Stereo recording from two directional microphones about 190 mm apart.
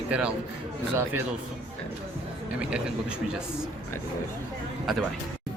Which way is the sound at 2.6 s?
5° right (ahead or behind).